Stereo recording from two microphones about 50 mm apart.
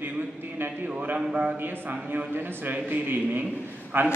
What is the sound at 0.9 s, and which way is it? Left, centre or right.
A man's voice, right.